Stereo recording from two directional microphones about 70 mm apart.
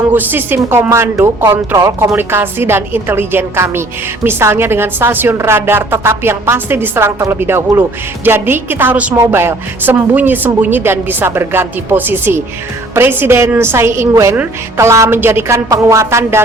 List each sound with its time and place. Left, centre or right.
0.1 s a woman's voice: right
9.1 s a woman's voice: right